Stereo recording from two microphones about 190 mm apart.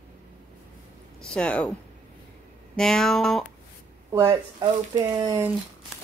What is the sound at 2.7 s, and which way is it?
Speech, 5° left (ahead or behind).